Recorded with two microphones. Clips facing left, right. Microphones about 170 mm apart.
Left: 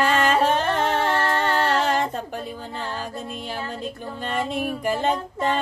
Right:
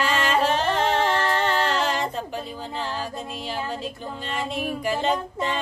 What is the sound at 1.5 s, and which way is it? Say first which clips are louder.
Music: left 2 dB; 50° left (ahead or behind).